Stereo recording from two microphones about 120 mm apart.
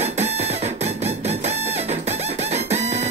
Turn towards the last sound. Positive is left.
turn(degrees=-70)  # may be behind; listen again after turning